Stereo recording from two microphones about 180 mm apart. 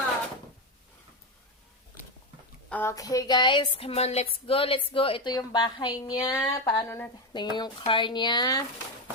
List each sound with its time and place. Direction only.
2.6 s a sound: 10° left (ahead or behind)
2.9 s a woman's voice: 20° left (ahead or behind)
7.3 s a woman's voice: 25° left (ahead or behind)